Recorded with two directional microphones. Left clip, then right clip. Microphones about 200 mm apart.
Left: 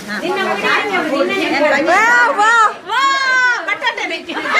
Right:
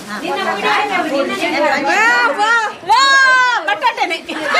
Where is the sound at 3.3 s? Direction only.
40° right (ahead or behind).